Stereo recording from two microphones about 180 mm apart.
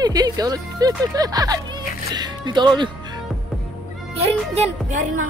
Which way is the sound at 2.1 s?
25° right (ahead or behind).